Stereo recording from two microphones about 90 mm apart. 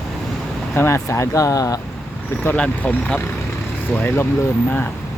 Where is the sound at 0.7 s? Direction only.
30° left (ahead or behind).